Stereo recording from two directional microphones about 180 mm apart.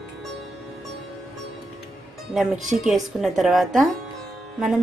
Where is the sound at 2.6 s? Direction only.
40° right (ahead or behind).